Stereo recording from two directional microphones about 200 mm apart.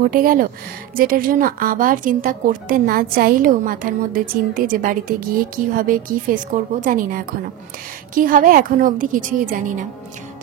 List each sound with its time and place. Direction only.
0.0 s a woman's voice: 45° right (ahead or behind)